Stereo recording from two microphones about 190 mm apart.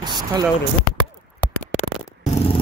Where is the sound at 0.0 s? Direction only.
20° right (ahead or behind).